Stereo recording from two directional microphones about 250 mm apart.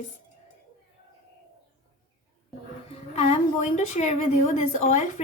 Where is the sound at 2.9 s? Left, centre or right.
Left.